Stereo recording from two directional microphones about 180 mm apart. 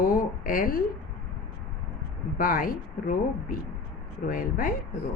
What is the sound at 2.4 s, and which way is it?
A woman's voice, 50° left (ahead or behind).